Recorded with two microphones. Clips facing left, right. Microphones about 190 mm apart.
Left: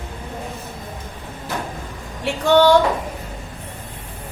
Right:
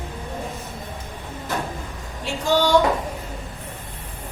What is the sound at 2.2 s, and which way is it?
Female singing, 60° left (ahead or behind).